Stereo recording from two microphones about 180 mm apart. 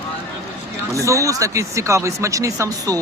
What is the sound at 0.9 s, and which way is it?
Speech, 15° right (ahead or behind).